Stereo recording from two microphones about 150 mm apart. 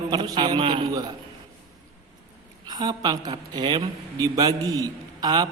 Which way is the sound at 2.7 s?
30° right (ahead or behind).